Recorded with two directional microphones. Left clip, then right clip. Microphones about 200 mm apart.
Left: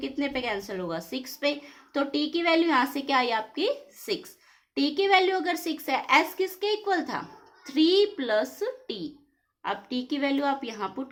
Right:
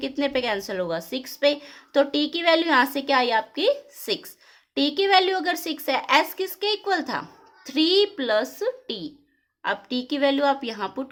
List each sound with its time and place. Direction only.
0.0 s a woman's voice: 40° right (ahead or behind)